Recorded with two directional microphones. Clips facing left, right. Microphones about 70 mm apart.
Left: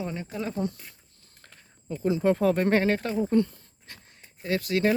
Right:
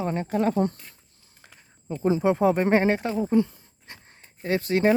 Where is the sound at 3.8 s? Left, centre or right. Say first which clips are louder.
Right 3 dB; right.